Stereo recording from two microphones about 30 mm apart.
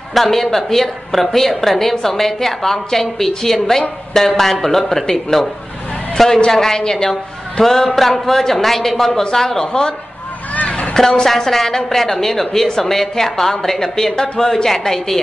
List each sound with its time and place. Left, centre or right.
0.1 s a woman's voice: centre
0.8 s a woman's voice: centre; by 9.9 s left
11.0 s a woman's voice: centre